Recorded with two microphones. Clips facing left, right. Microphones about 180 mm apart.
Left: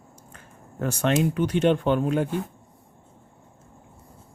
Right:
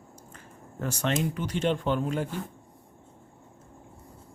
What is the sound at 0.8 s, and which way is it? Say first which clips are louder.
Speech: left 6 dB; 60° left (ahead or behind).